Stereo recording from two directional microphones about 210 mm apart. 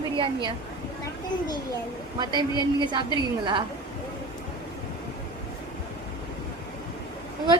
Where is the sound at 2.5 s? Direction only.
20° left (ahead or behind).